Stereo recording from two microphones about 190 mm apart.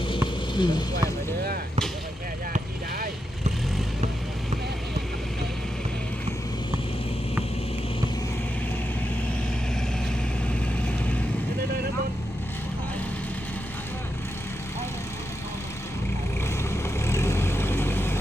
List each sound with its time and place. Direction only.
0.5 s speech: 25° left (ahead or behind)
16.7 s vehicle: 15° left (ahead or behind)